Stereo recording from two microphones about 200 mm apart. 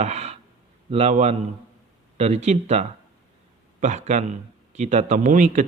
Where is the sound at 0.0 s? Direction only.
30° right (ahead or behind).